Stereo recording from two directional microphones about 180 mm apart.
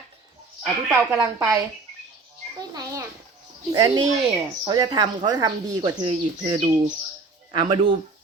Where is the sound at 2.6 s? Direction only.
20° right (ahead or behind).